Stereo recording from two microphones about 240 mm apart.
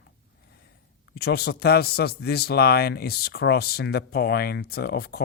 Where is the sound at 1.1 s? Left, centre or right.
Left.